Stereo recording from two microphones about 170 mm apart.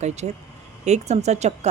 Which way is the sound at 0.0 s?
40° right (ahead or behind).